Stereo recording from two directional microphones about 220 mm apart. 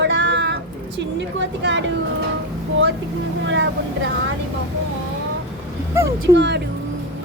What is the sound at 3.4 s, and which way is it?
Speech, 55° right (ahead or behind).